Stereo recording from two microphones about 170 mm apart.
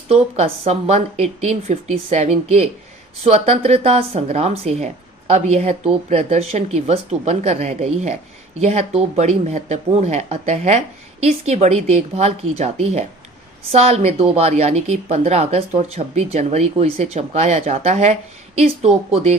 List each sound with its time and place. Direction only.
0.1 s a woman's voice: 35° right (ahead or behind)